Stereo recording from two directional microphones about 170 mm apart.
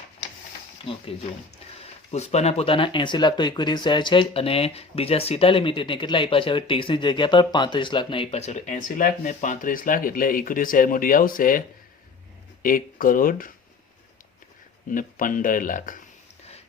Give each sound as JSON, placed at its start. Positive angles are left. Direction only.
{"t": 0.9, "sound": "speech", "side_deg": 30}
{"t": 12.6, "sound": "speech", "side_deg": 55}
{"t": 14.8, "sound": "speech", "side_deg": 50}